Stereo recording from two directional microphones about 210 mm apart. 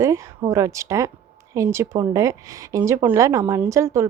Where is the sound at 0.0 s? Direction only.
15° right (ahead or behind).